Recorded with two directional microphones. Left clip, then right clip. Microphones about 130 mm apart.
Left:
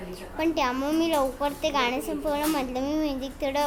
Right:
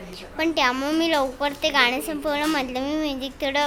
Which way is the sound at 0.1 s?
15° right (ahead or behind).